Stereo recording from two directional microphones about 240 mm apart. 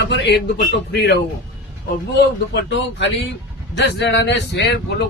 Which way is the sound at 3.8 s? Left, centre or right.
Left.